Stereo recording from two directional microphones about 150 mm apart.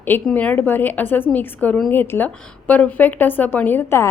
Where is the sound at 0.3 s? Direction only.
5° left (ahead or behind).